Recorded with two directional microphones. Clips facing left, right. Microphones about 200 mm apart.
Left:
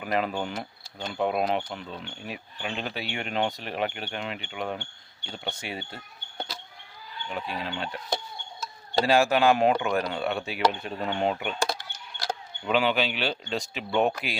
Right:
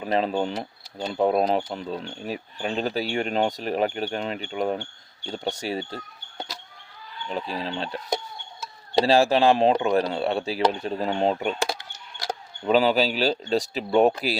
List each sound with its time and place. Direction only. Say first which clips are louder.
0.0 s speech: right 4 dB; 30° right (ahead or behind)
7.3 s speech: right 4 dB; 30° right (ahead or behind)
9.0 s speech: right 2 dB; 30° right (ahead or behind)